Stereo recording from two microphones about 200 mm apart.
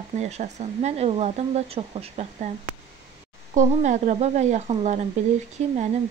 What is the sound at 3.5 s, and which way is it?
Speech, 35° right (ahead or behind).